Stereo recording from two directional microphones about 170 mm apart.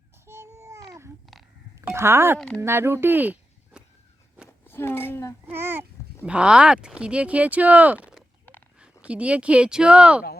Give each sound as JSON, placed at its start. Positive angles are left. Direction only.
{"t": 0.3, "sound": "babbling", "side_deg": -15}
{"t": 1.9, "sound": "speech", "side_deg": -15}
{"t": 4.4, "sound": "a sound", "side_deg": 15}
{"t": 5.5, "sound": "speech", "side_deg": -15}